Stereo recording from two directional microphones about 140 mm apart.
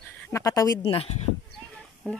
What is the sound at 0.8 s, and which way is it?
Speech, 40° left (ahead or behind).